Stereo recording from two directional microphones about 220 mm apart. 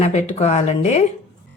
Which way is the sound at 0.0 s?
30° left (ahead or behind).